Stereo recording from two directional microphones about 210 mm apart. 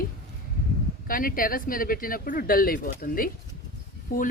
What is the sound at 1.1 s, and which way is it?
Speech, 40° left (ahead or behind).